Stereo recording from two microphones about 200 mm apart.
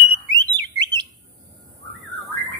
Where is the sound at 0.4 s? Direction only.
20° right (ahead or behind).